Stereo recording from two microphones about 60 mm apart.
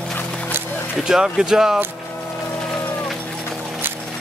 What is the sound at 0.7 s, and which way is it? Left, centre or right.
Music, left.